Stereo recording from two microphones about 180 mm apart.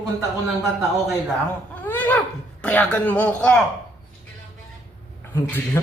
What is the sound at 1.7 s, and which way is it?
Laughter, 10° left (ahead or behind).